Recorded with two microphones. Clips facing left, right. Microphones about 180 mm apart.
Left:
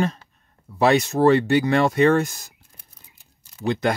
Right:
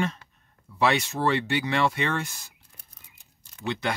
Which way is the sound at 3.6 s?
40° left (ahead or behind).